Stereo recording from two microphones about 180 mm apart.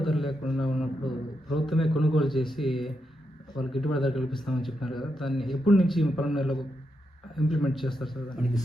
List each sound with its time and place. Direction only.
0.0 s a man's voice: centre (ahead or behind)